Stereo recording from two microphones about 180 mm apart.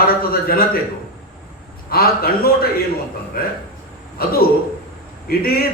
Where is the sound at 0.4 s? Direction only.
55° left (ahead or behind).